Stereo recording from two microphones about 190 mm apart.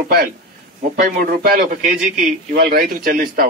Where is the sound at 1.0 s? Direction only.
50° right (ahead or behind).